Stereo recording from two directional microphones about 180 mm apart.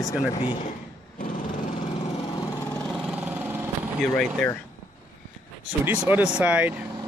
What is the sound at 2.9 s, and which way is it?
Vehicle, 5° right (ahead or behind).